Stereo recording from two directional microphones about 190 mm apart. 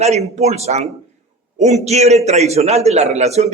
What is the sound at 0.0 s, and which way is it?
A man's voice, 35° right (ahead or behind).